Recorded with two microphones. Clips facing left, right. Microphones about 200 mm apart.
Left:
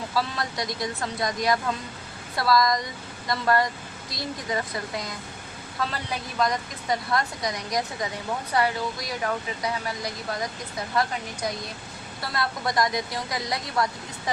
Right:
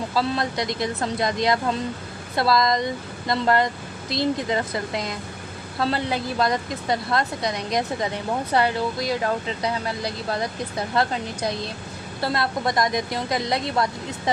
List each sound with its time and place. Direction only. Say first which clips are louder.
0.1 s a woman's voice: right 4 dB; 25° right (ahead or behind)
12.2 s a woman's voice: right 5 dB; 25° right (ahead or behind)